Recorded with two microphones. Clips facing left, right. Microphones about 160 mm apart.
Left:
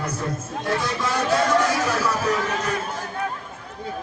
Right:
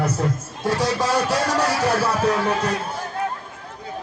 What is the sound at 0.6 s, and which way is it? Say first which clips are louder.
Music: right 4 dB; 80° right.